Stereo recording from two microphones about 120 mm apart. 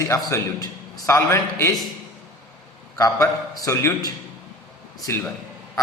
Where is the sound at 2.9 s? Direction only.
30° left (ahead or behind).